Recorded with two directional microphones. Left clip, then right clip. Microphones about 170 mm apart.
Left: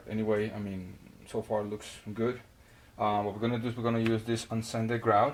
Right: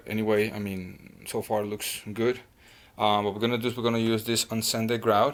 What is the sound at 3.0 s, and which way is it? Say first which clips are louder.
Speech: right 5 dB; 35° right (ahead or behind).